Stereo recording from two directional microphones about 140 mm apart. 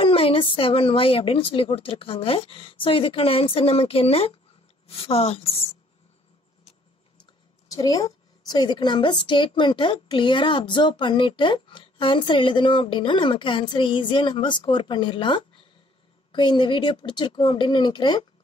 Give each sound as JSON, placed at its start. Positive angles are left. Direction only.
{"t": 0.0, "sound": "a woman's voice", "side_deg": 40}
{"t": 7.6, "sound": "a sound", "side_deg": 25}
{"t": 8.5, "sound": "a woman's voice", "side_deg": 30}